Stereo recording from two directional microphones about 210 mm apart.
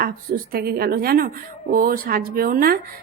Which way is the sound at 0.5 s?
50° right (ahead or behind).